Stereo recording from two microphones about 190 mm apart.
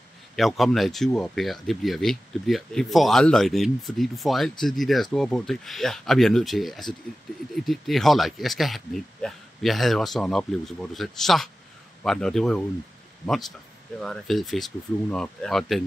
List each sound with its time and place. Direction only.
0.4 s speech: centre (ahead or behind)